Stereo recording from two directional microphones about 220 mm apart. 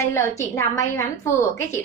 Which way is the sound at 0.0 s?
15° left (ahead or behind).